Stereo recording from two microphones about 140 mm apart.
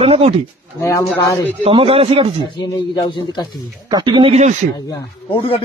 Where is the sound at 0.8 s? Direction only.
20° left (ahead or behind).